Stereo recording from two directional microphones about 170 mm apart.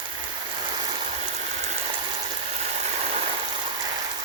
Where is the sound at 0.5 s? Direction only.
25° right (ahead or behind); by 1.7 s 40° right (ahead or behind).